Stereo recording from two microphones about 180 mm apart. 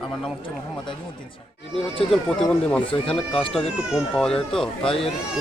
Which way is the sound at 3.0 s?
30° left (ahead or behind).